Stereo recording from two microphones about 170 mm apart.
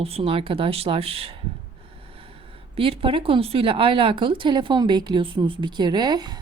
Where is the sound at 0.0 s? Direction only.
35° right (ahead or behind).